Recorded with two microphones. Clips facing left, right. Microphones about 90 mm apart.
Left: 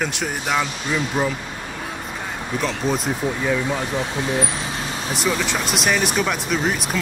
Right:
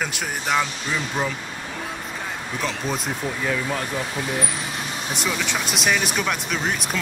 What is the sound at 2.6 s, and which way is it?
Speech, centre (ahead or behind).